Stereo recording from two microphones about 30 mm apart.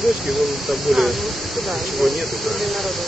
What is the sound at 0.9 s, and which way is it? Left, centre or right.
Speech, centre.